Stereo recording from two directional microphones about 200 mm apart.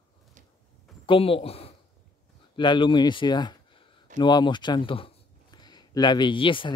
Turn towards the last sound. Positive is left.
turn(degrees=25)  # may be behind; listen again after turning